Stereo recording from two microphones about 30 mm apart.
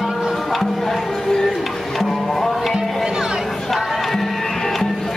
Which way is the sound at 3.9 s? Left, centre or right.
Centre.